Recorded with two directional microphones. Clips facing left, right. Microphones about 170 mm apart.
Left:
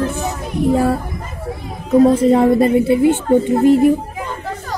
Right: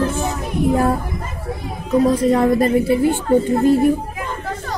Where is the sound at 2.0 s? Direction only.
30° left (ahead or behind).